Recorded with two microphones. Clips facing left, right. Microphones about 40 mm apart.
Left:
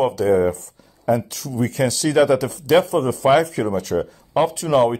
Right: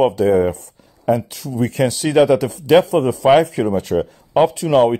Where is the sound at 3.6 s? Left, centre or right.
Right.